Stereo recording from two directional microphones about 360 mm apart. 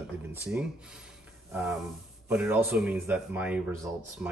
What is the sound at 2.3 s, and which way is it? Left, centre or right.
Speech, centre.